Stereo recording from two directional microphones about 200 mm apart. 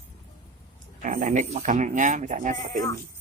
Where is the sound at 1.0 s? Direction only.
40° right (ahead or behind).